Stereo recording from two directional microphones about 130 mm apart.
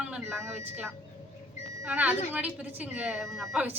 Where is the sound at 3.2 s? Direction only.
Centre (ahead or behind).